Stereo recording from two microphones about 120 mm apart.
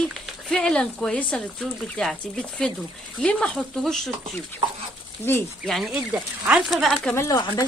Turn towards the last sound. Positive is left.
turn(degrees=30)  # may be behind; listen again after turning